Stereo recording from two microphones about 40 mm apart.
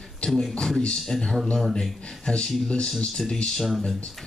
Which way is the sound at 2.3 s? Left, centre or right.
Centre.